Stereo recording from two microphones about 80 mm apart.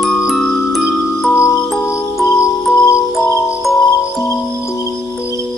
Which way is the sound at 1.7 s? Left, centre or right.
Centre.